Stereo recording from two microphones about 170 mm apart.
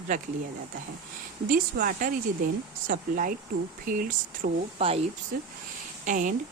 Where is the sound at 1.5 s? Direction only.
55° right (ahead or behind).